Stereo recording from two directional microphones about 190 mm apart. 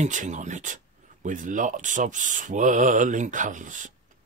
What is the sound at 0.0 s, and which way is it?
Speech, 40° right (ahead or behind).